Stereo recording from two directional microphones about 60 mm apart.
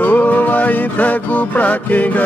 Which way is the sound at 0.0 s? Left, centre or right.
Left.